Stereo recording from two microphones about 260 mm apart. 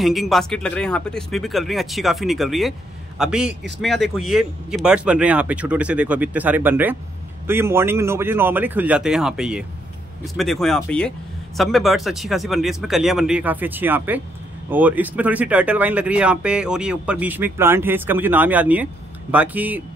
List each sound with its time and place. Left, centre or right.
0.0 s a man's voice: centre